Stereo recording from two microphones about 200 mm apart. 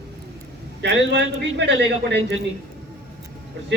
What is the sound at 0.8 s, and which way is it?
A man's voice, 60° right (ahead or behind).